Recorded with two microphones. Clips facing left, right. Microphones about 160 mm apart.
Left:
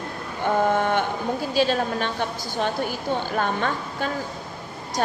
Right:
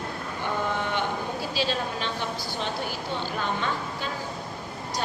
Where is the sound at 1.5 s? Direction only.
50° left (ahead or behind).